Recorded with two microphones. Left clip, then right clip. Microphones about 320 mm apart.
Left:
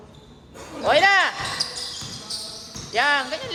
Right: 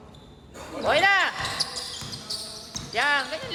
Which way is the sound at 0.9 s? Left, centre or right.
Left.